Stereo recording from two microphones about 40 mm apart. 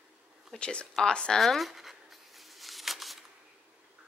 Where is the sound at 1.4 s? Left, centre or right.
Centre.